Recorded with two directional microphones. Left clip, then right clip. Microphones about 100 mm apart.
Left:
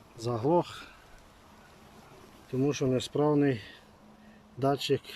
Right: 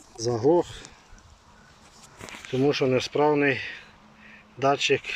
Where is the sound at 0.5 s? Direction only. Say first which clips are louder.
Right 4 dB; 20° left (ahead or behind).